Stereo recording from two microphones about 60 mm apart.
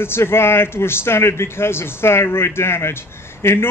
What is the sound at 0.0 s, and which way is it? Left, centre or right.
A man's voice, left.